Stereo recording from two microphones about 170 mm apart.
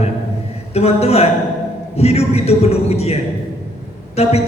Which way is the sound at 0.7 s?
35° left (ahead or behind).